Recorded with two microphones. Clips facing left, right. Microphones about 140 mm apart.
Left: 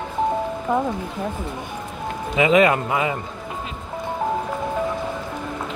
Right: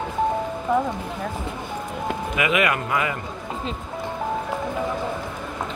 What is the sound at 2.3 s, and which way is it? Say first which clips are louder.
Speech: left 7 dB; 30° left (ahead or behind).